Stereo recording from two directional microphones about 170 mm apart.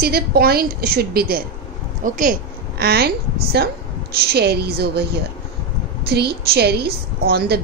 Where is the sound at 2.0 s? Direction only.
55° right (ahead or behind); by 3.1 s 70° right (ahead or behind).